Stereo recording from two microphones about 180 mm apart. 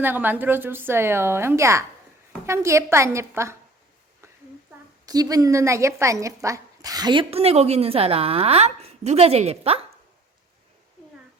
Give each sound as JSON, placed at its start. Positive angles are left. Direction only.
{"t": 0.0, "sound": "a woman's voice", "side_deg": -10}
{"t": 5.0, "sound": "speech", "side_deg": -20}